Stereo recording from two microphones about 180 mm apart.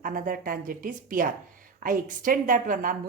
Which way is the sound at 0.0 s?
50° right (ahead or behind).